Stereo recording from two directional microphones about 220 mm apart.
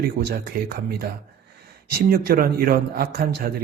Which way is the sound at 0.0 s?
45° right (ahead or behind).